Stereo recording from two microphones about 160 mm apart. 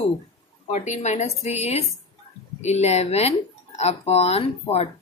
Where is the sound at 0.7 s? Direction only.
45° left (ahead or behind).